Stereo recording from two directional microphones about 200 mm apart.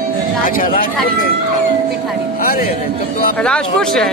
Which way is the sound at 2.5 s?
45° left (ahead or behind).